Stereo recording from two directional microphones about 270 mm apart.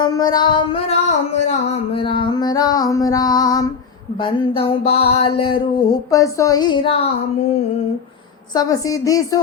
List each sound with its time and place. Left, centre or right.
0.0 s music: centre
4.2 s a sound: centre
8.5 s speech: centre